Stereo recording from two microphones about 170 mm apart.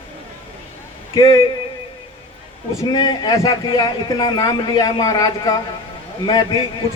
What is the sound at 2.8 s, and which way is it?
A man's voice, 25° left (ahead or behind).